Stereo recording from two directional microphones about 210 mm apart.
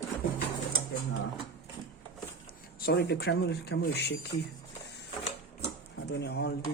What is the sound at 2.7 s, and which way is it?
Speech, 50° left (ahead or behind).